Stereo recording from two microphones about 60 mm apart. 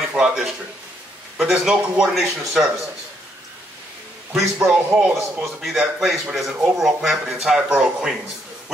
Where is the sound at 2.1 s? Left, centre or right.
Centre.